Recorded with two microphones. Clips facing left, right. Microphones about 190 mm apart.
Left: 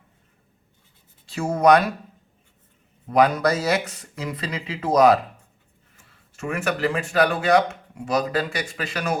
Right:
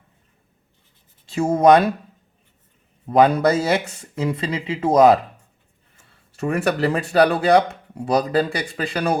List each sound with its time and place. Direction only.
1.3 s speech: 25° right (ahead or behind)
3.1 s speech: 25° right (ahead or behind)
6.3 s speech: 35° right (ahead or behind)